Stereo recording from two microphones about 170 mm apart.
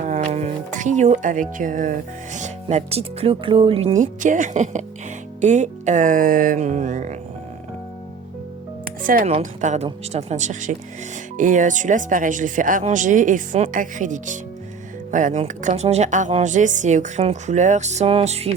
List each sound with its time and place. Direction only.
0.1 s speech: 40° right (ahead or behind)
3.9 s speech: 50° right (ahead or behind)
9.0 s speech: 55° right (ahead or behind); by 18.5 s 40° right (ahead or behind)